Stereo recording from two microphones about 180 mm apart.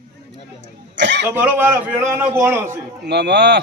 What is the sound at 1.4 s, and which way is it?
A man's voice, 10° right (ahead or behind).